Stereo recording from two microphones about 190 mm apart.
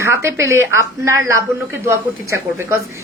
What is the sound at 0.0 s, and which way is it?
A woman's voice, 15° right (ahead or behind).